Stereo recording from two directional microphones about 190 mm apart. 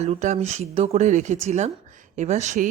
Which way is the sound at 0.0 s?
40° right (ahead or behind).